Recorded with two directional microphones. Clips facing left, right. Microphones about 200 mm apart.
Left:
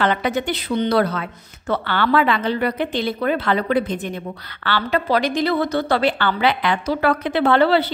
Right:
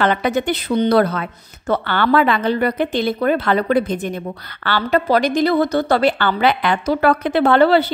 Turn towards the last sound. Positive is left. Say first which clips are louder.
# right 3 dB
turn(degrees=-45)  # may be behind; listen again after turning